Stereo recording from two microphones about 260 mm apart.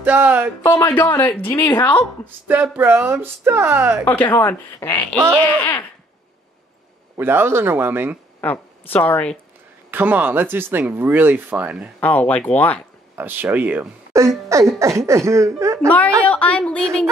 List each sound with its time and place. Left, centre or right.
0.0 s speech: centre
0.7 s a woman's voice: centre
2.2 s speech: centre
4.0 s a woman's voice: centre
7.2 s speech: centre
8.4 s a woman's voice: centre
9.8 s speech: centre
12.0 s speech: centre
13.2 s speech: centre
16.3 s speech: centre